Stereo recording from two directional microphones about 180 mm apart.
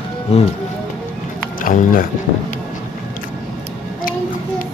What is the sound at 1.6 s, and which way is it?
Speech, 50° left (ahead or behind).